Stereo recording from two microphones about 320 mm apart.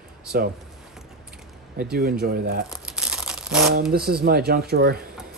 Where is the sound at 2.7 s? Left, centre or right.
Centre.